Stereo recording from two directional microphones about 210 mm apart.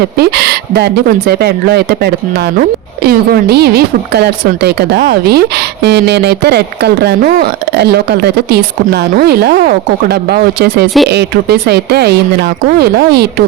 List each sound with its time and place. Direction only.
0.2 s a woman's voice: 50° right (ahead or behind)